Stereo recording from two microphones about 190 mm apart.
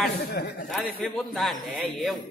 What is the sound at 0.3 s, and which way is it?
Speech, 55° left (ahead or behind).